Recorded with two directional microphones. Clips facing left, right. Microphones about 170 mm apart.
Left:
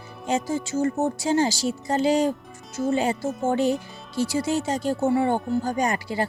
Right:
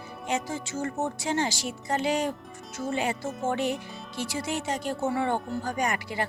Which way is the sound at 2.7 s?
20° left (ahead or behind).